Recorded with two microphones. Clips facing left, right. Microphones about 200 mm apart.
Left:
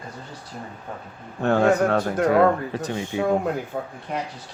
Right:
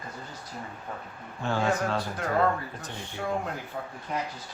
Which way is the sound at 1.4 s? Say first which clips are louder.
Left 9 dB; 60° left (ahead or behind).